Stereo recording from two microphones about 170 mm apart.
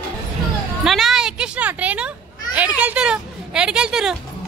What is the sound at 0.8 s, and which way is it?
A child's voice, centre (ahead or behind).